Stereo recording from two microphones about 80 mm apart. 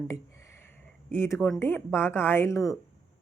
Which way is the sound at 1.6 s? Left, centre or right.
Left.